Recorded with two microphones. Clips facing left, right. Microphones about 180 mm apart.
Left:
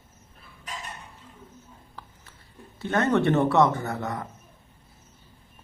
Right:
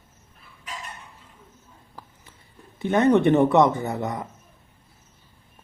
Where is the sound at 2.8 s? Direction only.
15° right (ahead or behind).